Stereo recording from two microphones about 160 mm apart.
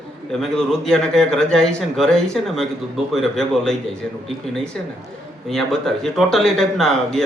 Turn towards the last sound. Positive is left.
turn(degrees=0)  # may be behind; listen again after turning